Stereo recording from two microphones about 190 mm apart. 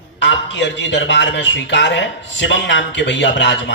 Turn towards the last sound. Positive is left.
turn(degrees=70)  # may be behind; listen again after turning